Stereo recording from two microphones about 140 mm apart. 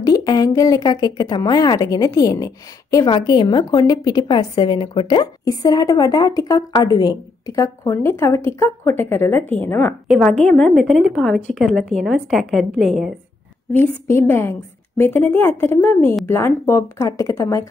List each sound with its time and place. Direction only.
0.0 s a woman's voice: 25° left (ahead or behind)
10.0 s a woman's voice: centre (ahead or behind)
13.7 s a woman's voice: 15° left (ahead or behind)